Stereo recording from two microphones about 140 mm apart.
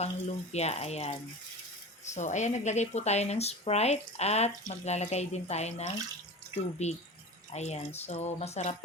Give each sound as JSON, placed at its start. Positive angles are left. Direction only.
{"t": 0.0, "sound": "speech", "side_deg": 50}
{"t": 2.1, "sound": "speech", "side_deg": 60}